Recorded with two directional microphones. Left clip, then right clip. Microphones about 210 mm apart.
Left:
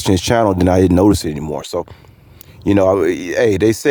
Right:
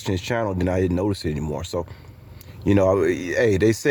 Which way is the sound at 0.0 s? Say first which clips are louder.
Left 11 dB; 40° left (ahead or behind).